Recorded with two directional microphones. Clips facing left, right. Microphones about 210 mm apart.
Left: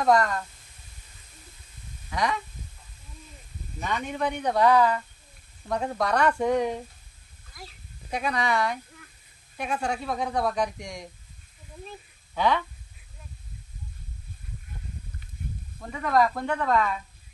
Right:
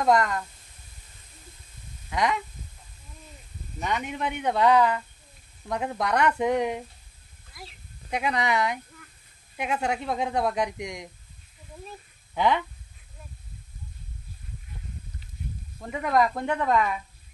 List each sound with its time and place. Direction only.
0.0 s a woman's voice: 20° right (ahead or behind)
3.8 s a woman's voice: 20° right (ahead or behind)
8.1 s a woman's voice: 20° right (ahead or behind)
12.4 s a woman's voice: 20° right (ahead or behind)
15.9 s a woman's voice: 20° right (ahead or behind)